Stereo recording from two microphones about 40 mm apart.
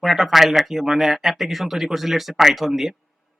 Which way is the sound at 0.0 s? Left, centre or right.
Centre.